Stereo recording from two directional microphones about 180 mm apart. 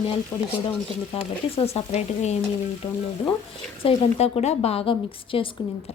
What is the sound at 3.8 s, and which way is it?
A woman's voice, 35° left (ahead or behind).